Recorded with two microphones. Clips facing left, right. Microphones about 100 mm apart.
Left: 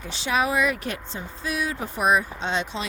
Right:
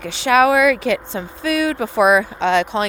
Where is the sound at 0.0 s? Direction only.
65° right (ahead or behind).